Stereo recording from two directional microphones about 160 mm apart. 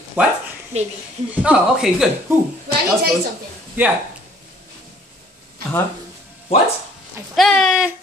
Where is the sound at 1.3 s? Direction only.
10° right (ahead or behind).